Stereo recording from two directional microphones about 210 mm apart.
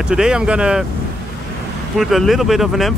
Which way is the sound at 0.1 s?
5° right (ahead or behind).